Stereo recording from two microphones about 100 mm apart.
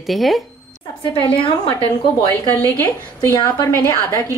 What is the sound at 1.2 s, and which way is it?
Speech, 55° left (ahead or behind).